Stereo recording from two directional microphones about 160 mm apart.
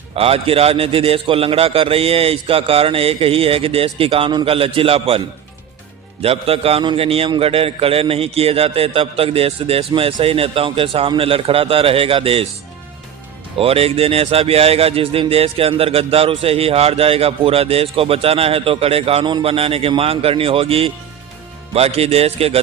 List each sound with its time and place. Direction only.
0.2 s speech: 35° right (ahead or behind)
6.2 s speech: 40° right (ahead or behind)
13.6 s speech: 35° right (ahead or behind)